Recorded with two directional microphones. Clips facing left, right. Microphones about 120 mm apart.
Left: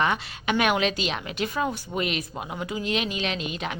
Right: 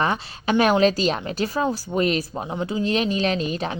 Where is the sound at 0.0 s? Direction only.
35° right (ahead or behind).